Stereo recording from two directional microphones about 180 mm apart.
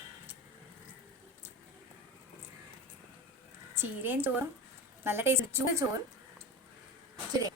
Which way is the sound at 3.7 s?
10° right (ahead or behind).